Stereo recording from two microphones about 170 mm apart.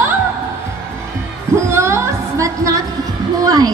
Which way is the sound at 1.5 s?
15° right (ahead or behind).